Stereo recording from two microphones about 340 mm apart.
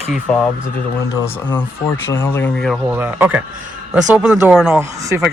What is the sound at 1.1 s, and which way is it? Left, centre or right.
Speech, centre.